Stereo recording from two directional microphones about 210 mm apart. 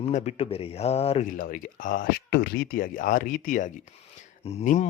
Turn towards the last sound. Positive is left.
turn(degrees=35)  # may be behind; listen again after turning